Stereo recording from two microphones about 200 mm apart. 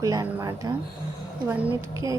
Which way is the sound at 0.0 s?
15° right (ahead or behind).